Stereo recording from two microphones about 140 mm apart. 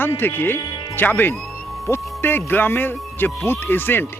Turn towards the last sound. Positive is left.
turn(degrees=15)  # may be behind; listen again after turning